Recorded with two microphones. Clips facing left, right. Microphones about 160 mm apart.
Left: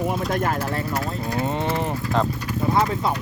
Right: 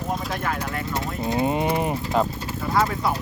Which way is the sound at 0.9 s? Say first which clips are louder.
Even; 20° right (ahead or behind).